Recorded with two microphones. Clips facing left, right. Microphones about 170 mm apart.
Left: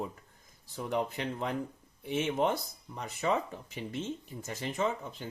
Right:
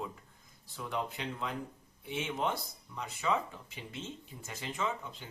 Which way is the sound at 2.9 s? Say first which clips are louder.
Left 2 dB; 45° left (ahead or behind).